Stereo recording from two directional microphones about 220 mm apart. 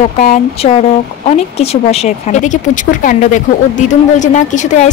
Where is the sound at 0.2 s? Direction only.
35° left (ahead or behind).